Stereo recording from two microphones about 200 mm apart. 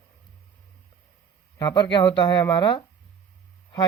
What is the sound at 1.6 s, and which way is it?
Speech, 20° left (ahead or behind).